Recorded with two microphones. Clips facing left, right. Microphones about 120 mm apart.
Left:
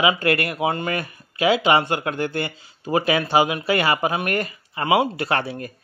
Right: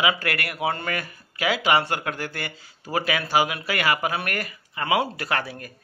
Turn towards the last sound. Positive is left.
turn(degrees=25)  # may be behind; listen again after turning